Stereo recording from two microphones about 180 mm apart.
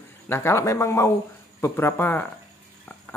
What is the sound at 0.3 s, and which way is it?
Speech, 15° left (ahead or behind).